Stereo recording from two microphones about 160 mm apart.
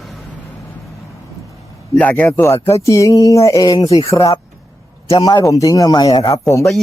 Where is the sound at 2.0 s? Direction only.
10° left (ahead or behind).